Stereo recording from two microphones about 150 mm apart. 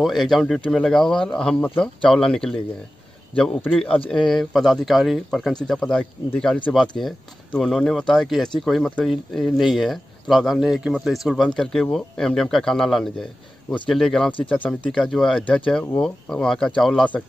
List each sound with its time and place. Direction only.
0.0 s a man's voice: centre (ahead or behind)